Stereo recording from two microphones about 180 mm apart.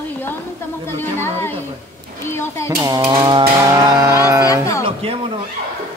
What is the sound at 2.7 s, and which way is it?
Speech, 20° right (ahead or behind).